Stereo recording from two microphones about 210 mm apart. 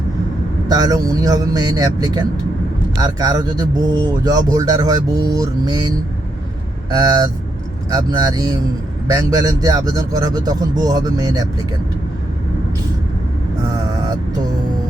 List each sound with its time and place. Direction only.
0.7 s speech: 15° right (ahead or behind)
6.9 s speech: 15° right (ahead or behind)